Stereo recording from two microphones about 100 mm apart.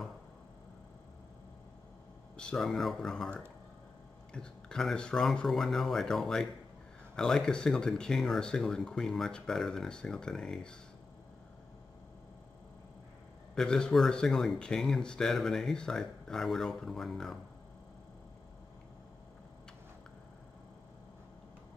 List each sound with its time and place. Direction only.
2.3 s speech: 10° left (ahead or behind)
4.3 s speech: 5° left (ahead or behind)
13.6 s speech: 5° left (ahead or behind)